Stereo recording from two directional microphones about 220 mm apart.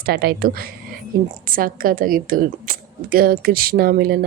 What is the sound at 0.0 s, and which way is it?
A woman's voice, 45° right (ahead or behind).